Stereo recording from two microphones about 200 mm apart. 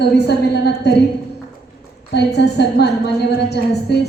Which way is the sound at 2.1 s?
55° left (ahead or behind).